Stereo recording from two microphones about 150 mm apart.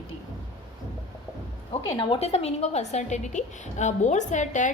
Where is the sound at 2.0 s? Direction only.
35° left (ahead or behind); by 4.7 s 55° left (ahead or behind).